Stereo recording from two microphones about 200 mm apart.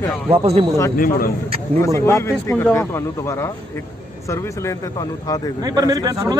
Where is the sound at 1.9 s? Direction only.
15° left (ahead or behind).